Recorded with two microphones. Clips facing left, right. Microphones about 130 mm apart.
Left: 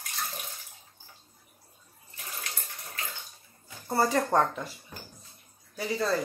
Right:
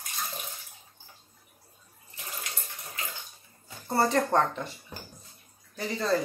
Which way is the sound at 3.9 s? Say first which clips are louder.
Right 1 dB; centre (ahead or behind).